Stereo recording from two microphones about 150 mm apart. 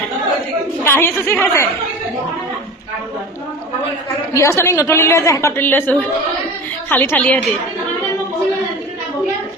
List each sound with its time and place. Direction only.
0.8 s a woman's voice: 15° left (ahead or behind)
4.3 s a woman's voice: 20° left (ahead or behind)